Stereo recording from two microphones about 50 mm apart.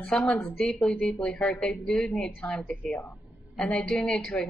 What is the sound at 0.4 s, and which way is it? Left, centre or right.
A woman's voice, left.